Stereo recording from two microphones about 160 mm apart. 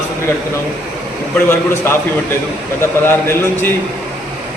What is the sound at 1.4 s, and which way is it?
Speech, 15° left (ahead or behind).